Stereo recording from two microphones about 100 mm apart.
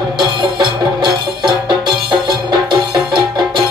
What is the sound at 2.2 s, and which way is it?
Music, 50° right (ahead or behind).